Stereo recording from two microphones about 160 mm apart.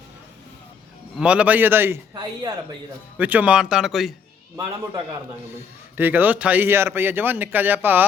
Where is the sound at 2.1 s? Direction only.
25° right (ahead or behind).